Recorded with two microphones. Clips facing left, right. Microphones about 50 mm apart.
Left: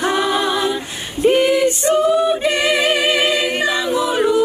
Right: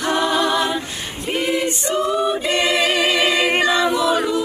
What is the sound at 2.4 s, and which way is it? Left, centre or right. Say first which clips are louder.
A capella: left 2 dB; left.